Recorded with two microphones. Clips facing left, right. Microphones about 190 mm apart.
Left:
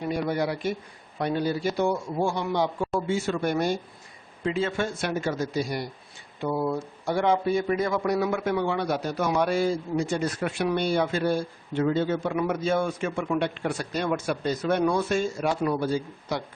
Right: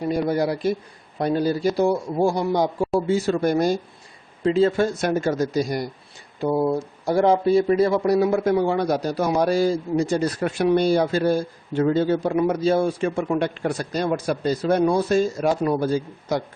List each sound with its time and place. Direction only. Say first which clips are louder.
0.0 s speech: right 5 dB; 40° right (ahead or behind)
6.4 s speech: right 6 dB; 25° right (ahead or behind)